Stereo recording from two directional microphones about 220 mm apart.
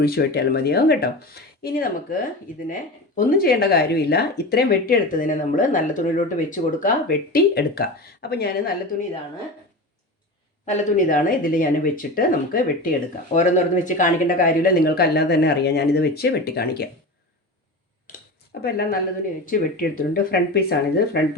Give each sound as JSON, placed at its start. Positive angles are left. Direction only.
{"t": 0.0, "sound": "speech", "side_deg": 45}
{"t": 10.7, "sound": "speech", "side_deg": 35}
{"t": 18.6, "sound": "speech", "side_deg": 45}